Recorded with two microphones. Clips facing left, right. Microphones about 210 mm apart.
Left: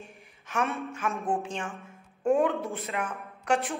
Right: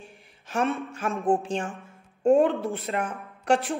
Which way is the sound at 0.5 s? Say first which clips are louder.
Right 4 dB; 30° right (ahead or behind).